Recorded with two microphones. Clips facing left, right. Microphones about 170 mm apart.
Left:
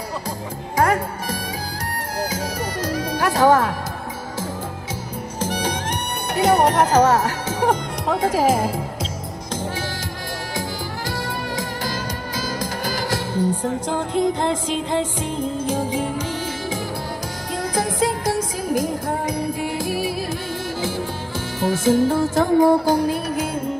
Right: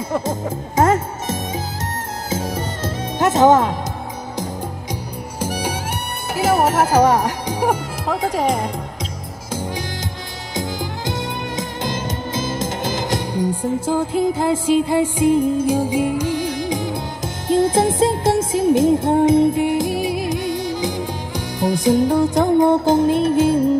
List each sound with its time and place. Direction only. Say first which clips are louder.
0.3 s music: right 5 dB; 25° right (ahead or behind)
5.4 s music: right 1 dB; 10° right (ahead or behind)
9.5 s music: right 2 dB; 10° right (ahead or behind); by 23.6 s 30° right (ahead or behind)